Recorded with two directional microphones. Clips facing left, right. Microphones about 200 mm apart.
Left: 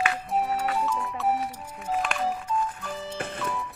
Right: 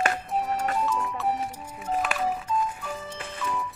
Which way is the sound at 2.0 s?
5° right (ahead or behind).